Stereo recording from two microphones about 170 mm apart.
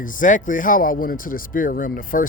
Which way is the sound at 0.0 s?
50° left (ahead or behind).